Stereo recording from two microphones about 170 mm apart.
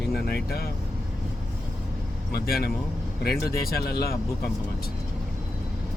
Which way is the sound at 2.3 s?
65° left (ahead or behind).